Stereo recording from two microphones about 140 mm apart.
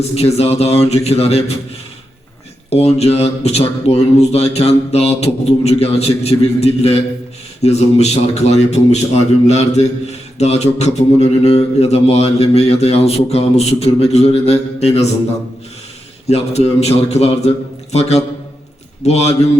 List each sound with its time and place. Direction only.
0.1 s speech: 45° left (ahead or behind)
2.6 s speech: 50° left (ahead or behind)
16.3 s speech: 50° left (ahead or behind)